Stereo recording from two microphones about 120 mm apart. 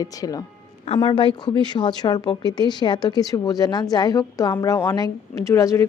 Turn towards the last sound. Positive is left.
turn(degrees=25)  # may be behind; listen again after turning